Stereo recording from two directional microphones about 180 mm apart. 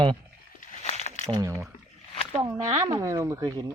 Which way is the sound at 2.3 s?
25° right (ahead or behind).